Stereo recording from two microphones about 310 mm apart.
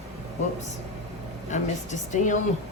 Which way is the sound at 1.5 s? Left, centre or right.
Left.